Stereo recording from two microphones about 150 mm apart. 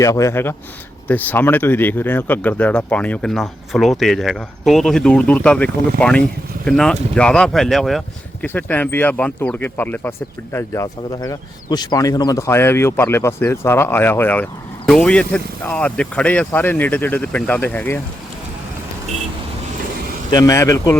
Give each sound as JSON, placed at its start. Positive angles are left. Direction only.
{"t": 0.0, "sound": "speech", "side_deg": 20}
{"t": 20.3, "sound": "speech", "side_deg": 20}